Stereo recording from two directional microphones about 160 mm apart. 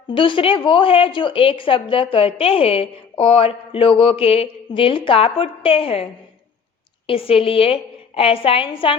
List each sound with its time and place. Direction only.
0.1 s a woman's voice: 30° left (ahead or behind)
7.1 s a woman's voice: 35° left (ahead or behind)